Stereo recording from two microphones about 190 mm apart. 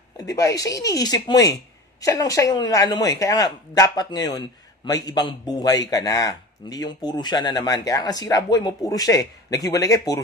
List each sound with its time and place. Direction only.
0.2 s speech: 20° left (ahead or behind)